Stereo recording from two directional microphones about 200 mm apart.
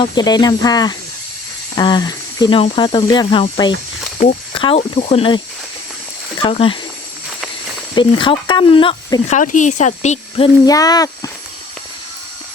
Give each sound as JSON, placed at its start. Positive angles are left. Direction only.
{"t": 0.0, "sound": "speech", "side_deg": 20}
{"t": 6.4, "sound": "speech", "side_deg": 25}
{"t": 7.9, "sound": "speech", "side_deg": 25}
{"t": 9.2, "sound": "speech", "side_deg": 40}